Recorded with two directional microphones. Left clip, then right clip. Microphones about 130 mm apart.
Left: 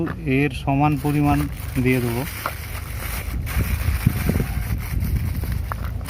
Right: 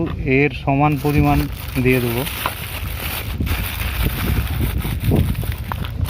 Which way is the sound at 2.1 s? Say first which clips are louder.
Right 4 dB; 90° right.